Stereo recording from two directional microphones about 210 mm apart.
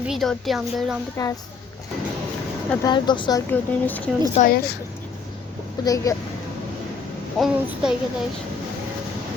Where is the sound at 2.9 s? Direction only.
20° left (ahead or behind).